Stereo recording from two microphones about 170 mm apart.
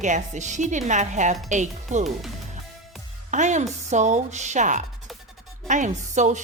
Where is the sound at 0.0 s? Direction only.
45° right (ahead or behind).